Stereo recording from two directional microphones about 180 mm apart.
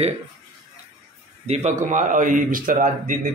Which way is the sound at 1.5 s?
40° right (ahead or behind).